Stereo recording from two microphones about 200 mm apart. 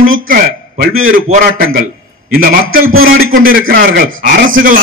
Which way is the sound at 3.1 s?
45° right (ahead or behind).